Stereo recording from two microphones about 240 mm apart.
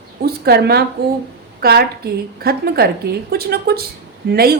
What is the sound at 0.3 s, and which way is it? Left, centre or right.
A woman's voice, right.